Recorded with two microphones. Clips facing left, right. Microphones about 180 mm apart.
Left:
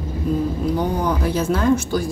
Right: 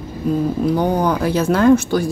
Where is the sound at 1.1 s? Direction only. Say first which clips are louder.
Right 3 dB; 75° right (ahead or behind).